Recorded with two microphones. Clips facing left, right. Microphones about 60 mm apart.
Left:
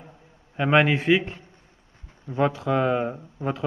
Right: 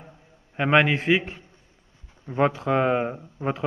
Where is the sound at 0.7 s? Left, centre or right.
Centre.